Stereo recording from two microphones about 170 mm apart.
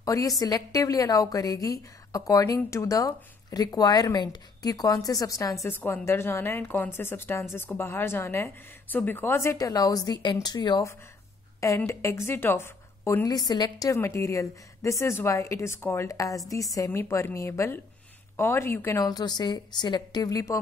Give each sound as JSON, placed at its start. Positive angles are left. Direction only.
{"t": 0.0, "sound": "a woman's voice", "side_deg": 20}